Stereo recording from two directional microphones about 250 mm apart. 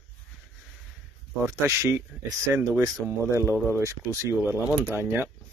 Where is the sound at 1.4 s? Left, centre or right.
Centre.